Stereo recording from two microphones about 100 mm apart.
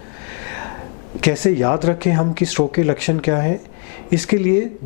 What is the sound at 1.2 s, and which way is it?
Speech, 10° left (ahead or behind).